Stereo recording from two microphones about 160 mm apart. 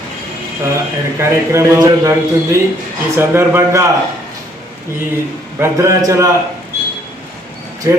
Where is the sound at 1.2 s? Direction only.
15° right (ahead or behind).